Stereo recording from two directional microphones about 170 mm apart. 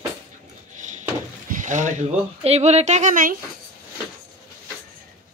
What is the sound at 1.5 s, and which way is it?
Speech, 50° right (ahead or behind).